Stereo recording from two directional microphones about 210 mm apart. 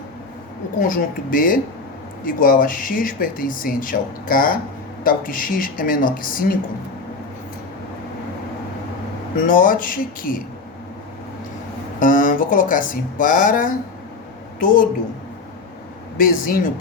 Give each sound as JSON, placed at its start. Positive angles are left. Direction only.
{"t": 0.8, "sound": "speech", "side_deg": 40}
{"t": 9.5, "sound": "speech", "side_deg": 40}
{"t": 11.9, "sound": "speech", "side_deg": 40}
{"t": 16.1, "sound": "speech", "side_deg": 40}